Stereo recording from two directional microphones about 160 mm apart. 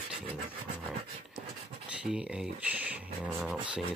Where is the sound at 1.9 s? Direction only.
5° right (ahead or behind).